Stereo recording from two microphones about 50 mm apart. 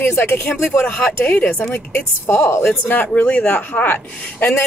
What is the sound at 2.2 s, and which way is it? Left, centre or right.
Speech, left.